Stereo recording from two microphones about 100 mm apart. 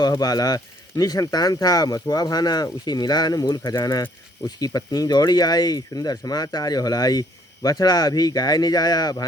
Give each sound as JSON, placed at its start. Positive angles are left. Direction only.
{"t": 0.1, "sound": "speech", "side_deg": 40}